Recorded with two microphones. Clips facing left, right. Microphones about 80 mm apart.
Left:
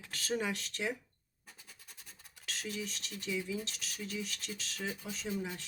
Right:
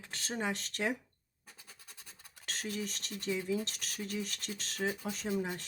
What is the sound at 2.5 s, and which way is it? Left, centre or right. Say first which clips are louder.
Speech: right 2 dB; right.